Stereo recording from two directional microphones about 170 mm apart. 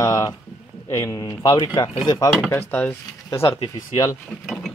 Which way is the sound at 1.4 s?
30° left (ahead or behind).